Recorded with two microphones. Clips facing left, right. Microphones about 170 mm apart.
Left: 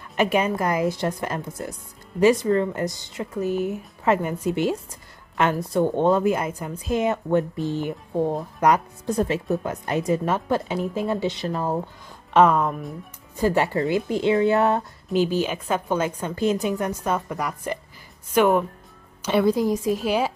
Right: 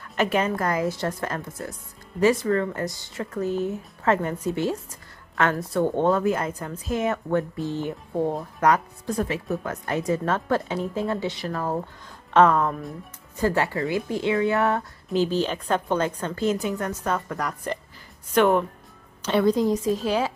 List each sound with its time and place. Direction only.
0.1 s a woman's voice: 15° left (ahead or behind)
15.1 s a woman's voice: 10° left (ahead or behind)